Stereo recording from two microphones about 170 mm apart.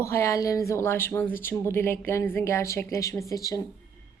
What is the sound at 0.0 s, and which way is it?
A woman's voice, 15° left (ahead or behind).